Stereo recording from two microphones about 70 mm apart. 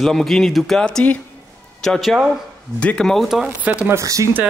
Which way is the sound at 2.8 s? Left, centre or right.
Centre.